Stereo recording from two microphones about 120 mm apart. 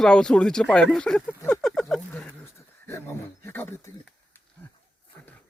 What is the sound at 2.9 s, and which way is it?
Wild animals, 20° left (ahead or behind).